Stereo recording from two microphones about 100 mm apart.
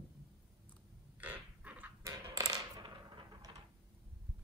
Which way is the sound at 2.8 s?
50° right (ahead or behind).